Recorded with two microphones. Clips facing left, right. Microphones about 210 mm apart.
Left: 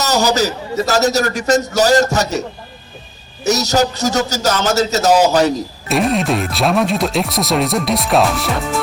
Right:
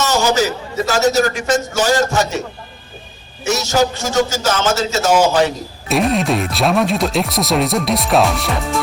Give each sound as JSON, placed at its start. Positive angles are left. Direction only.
{"t": 0.0, "sound": "a man's voice", "side_deg": 40}
{"t": 3.4, "sound": "a man's voice", "side_deg": 40}
{"t": 5.9, "sound": "speech", "side_deg": 0}